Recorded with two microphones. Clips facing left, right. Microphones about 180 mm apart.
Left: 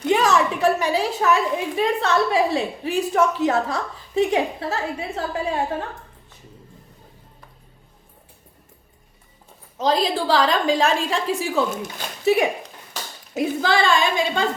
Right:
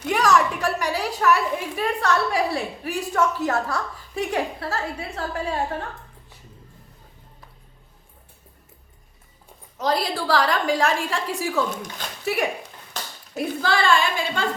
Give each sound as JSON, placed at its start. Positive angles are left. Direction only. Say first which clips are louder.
{"t": 0.0, "sound": "a woman's voice", "louder": "left 2 dB", "side_deg": 20}
{"t": 9.7, "sound": "a woman's voice", "louder": "left 3 dB", "side_deg": 20}
{"t": 11.7, "sound": "speech", "louder": "left 3 dB", "side_deg": 5}
{"t": 12.2, "sound": "speech", "louder": "left 6 dB", "side_deg": 20}